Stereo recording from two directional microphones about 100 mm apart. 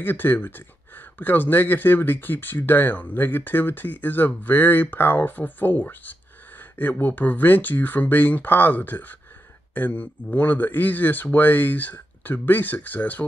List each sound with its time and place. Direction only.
0.0 s speech: 20° left (ahead or behind)